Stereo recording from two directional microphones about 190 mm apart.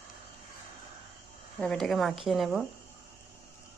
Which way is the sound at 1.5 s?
5° left (ahead or behind).